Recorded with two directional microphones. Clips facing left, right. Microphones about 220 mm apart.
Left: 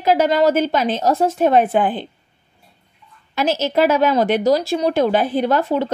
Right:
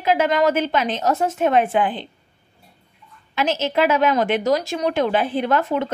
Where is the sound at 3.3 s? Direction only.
40° left (ahead or behind).